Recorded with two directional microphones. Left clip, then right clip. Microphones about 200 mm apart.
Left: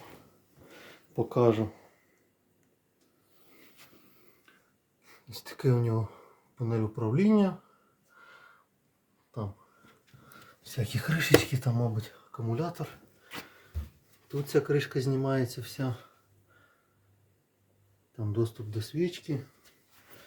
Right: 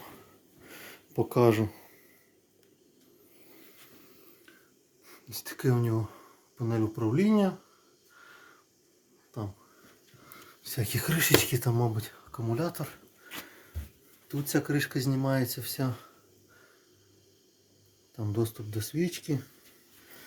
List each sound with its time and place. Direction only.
1.1 s speech: 25° right (ahead or behind)
5.3 s speech: 15° right (ahead or behind)
10.7 s speech: 30° right (ahead or behind)
14.3 s speech: 35° right (ahead or behind)
18.3 s speech: 35° right (ahead or behind)